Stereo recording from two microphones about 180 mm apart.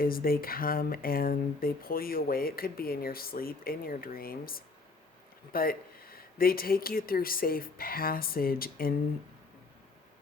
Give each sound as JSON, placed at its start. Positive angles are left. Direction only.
{"t": 0.0, "sound": "speech", "side_deg": 55}